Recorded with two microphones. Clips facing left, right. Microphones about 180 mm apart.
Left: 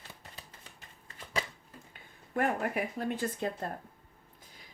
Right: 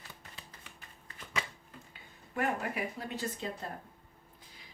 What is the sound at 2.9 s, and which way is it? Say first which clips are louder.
Speech: left 5 dB; 50° left (ahead or behind).